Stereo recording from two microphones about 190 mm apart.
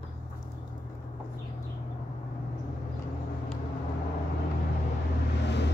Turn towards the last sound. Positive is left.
turn(degrees=65)  # may be behind; listen again after turning